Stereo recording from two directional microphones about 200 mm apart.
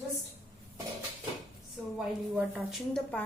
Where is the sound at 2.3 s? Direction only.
5° right (ahead or behind).